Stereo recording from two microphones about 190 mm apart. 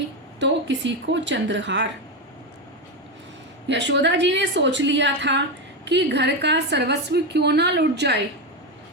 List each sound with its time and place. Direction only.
0.3 s a woman's voice: 70° right (ahead or behind)
3.7 s a woman's voice: 70° right (ahead or behind)